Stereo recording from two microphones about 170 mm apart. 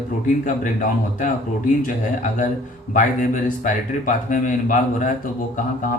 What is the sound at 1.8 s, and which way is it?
Speech, 50° left (ahead or behind).